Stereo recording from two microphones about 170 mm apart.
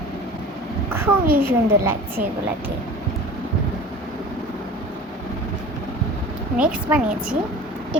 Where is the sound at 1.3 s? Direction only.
60° right (ahead or behind).